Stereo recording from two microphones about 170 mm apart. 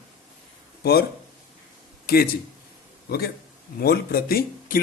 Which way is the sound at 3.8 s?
65° left (ahead or behind).